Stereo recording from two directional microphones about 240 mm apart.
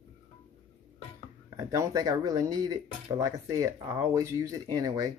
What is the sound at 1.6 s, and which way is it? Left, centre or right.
Speech, centre.